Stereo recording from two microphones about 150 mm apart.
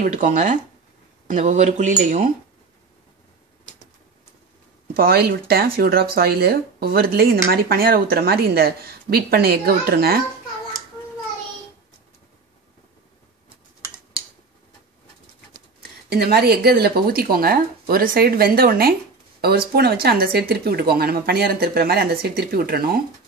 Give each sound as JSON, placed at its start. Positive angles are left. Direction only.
{"t": 0.0, "sound": "speech", "side_deg": -60}
{"t": 4.9, "sound": "speech", "side_deg": -90}
{"t": 16.1, "sound": "speech", "side_deg": -90}